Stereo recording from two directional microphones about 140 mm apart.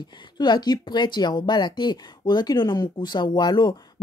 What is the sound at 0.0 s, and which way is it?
A woman's voice, 35° left (ahead or behind).